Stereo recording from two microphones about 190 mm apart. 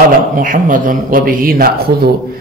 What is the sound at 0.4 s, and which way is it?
A man's voice, 45° right (ahead or behind).